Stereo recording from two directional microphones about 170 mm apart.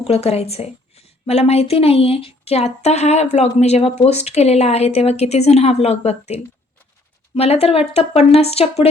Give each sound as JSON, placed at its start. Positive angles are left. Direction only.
{"t": 0.0, "sound": "a woman's voice", "side_deg": 35}